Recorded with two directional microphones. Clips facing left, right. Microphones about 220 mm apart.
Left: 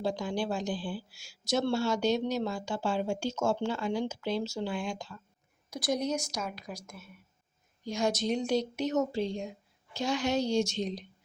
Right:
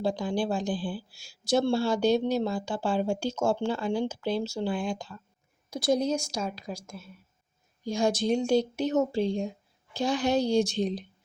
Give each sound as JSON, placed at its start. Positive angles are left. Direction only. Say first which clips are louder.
{"t": 0.0, "sound": "a woman's voice", "louder": "right 4 dB", "side_deg": -30}